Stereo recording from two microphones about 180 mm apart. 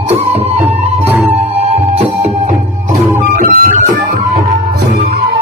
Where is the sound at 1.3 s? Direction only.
35° right (ahead or behind).